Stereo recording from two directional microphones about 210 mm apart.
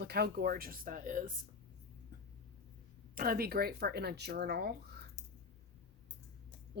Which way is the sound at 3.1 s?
45° right (ahead or behind).